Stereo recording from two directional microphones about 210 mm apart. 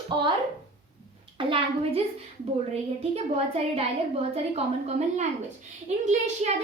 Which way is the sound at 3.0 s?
30° right (ahead or behind).